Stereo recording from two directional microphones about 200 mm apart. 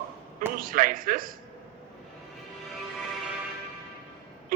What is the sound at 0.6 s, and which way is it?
Speech, 45° right (ahead or behind).